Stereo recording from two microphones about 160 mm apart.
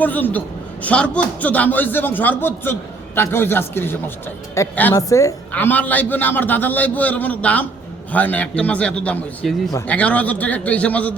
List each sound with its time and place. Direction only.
0.0 s a man's voice: 10° left (ahead or behind)